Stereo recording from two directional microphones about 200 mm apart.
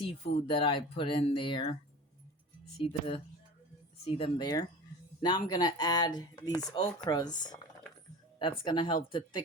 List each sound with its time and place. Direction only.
0.0 s speech: 25° left (ahead or behind)
2.7 s speech: 25° left (ahead or behind)